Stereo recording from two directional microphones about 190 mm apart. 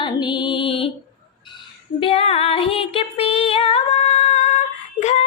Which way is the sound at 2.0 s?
30° left (ahead or behind).